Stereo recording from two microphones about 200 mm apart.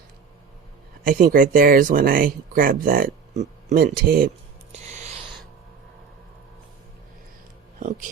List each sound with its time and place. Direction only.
1.0 s speech: 45° right (ahead or behind)